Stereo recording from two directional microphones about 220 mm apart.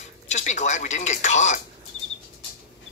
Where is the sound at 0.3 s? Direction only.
30° left (ahead or behind).